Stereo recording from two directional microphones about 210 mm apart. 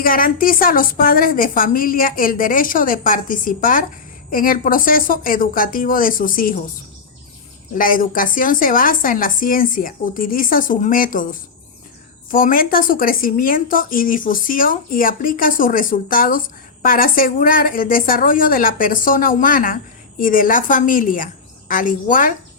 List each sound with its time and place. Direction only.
0.0 s a woman's voice: 45° left (ahead or behind)
7.8 s a woman's voice: 40° left (ahead or behind)